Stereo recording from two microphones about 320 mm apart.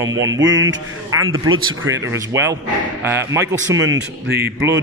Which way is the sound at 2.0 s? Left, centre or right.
Centre.